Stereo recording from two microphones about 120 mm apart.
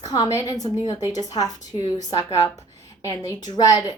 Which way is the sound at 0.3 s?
30° left (ahead or behind).